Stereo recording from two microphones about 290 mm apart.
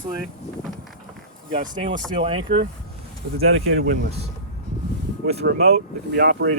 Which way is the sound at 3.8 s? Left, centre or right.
Right.